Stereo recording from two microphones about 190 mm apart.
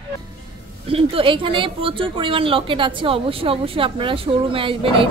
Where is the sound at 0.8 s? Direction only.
30° right (ahead or behind).